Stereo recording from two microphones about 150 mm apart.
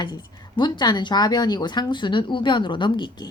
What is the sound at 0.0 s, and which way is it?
Speech, 30° left (ahead or behind).